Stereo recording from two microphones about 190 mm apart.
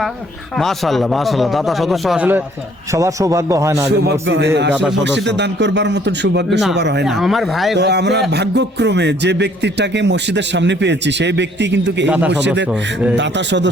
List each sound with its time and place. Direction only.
0.5 s a man's voice: centre (ahead or behind); by 3.8 s 15° right (ahead or behind)
3.8 s a man's voice: 60° right (ahead or behind)
4.7 s speech: 5° right (ahead or behind)
5.0 s a man's voice: 65° right (ahead or behind)
7.0 s speech: centre (ahead or behind)
7.8 s a man's voice: 60° right (ahead or behind)
12.0 s a man's voice: 10° right (ahead or behind)
13.1 s a man's voice: 70° right (ahead or behind)